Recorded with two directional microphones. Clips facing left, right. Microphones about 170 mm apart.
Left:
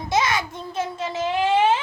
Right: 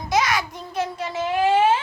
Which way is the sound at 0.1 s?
25° left (ahead or behind).